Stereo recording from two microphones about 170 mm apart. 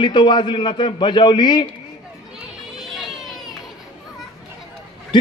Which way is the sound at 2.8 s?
Centre (ahead or behind).